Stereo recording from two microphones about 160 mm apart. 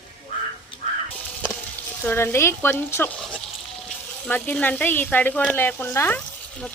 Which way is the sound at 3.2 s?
5° left (ahead or behind).